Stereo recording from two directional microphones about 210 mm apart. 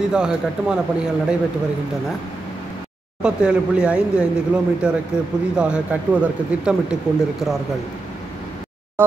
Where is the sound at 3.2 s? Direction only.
5° right (ahead or behind).